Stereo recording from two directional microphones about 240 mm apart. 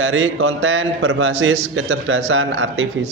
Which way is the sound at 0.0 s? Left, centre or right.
Right.